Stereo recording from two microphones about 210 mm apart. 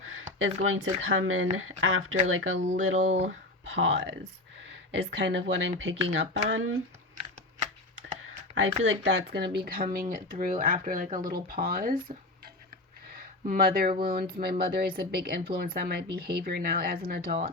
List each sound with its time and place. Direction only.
0.0 s speech: 70° right (ahead or behind)
3.0 s speech: 35° right (ahead or behind)
3.7 s speech: 60° right (ahead or behind)
8.5 s speech: 65° right (ahead or behind)
9.3 s speech: 50° right (ahead or behind)
13.1 s a sound: 40° right (ahead or behind)
14.0 s speech: 45° right (ahead or behind)